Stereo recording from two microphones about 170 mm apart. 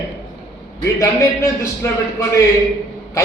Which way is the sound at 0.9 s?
15° left (ahead or behind).